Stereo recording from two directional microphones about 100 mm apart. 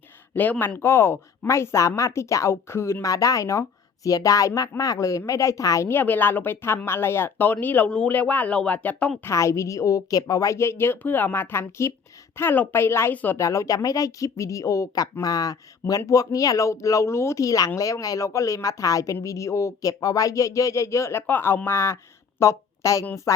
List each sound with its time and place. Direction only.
0.3 s speech: 15° left (ahead or behind); by 5.9 s 35° left (ahead or behind)
5.9 s speech: 20° left (ahead or behind)
9.2 s a woman's voice: 30° left (ahead or behind)